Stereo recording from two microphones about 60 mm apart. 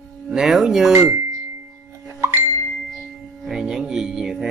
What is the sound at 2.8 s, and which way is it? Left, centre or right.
Singing bowl, centre.